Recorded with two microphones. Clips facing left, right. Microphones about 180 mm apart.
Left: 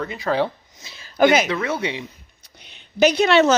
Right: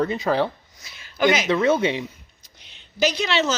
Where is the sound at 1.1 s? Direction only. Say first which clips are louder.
Left 4 dB; 50° left (ahead or behind).